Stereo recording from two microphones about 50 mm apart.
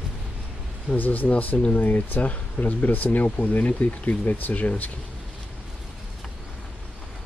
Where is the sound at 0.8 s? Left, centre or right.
Left.